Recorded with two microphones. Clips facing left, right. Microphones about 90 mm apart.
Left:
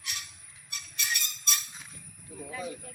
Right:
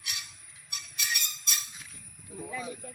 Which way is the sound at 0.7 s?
5° right (ahead or behind).